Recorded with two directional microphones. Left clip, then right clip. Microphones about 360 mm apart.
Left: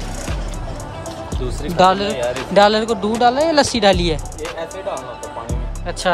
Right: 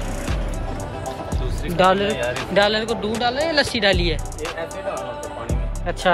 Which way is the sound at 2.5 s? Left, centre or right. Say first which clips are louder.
Left 6 dB; centre.